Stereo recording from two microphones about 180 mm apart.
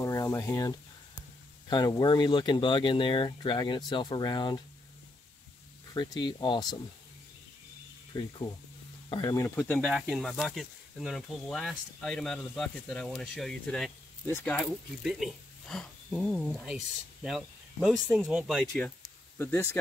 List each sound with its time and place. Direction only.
0.0 s a sound: 15° left (ahead or behind)
1.7 s speech: 25° left (ahead or behind)
5.9 s speech: 25° left (ahead or behind)
8.1 s speech: 25° left (ahead or behind); by 9.8 s 10° left (ahead or behind)
9.8 s speech: 5° right (ahead or behind); by 19.8 s 15° left (ahead or behind)